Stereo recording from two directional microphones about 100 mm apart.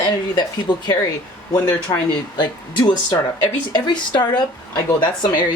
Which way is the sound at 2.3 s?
50° left (ahead or behind).